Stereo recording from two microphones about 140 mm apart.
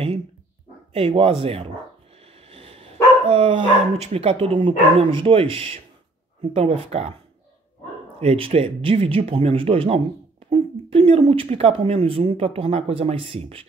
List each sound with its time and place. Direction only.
0.9 s speech: 40° right (ahead or behind)
2.1 s a sound: 45° right (ahead or behind)
3.3 s speech: 40° right (ahead or behind)
8.2 s speech: 45° right (ahead or behind)